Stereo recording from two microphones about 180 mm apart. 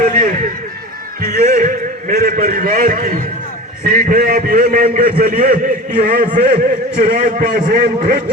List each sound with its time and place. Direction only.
0.0 s a man's voice: 50° right (ahead or behind)